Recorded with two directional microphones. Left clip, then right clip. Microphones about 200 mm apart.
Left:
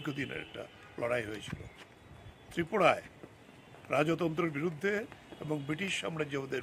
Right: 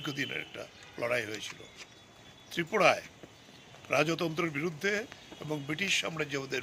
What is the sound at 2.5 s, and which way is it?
Speech, centre (ahead or behind).